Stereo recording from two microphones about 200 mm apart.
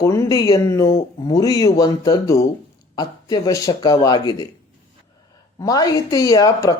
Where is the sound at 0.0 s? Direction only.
15° left (ahead or behind).